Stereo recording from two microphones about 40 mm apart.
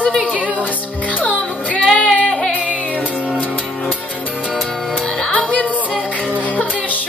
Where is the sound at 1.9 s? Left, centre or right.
Centre.